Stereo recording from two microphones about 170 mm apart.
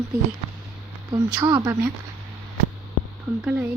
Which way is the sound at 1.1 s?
20° right (ahead or behind).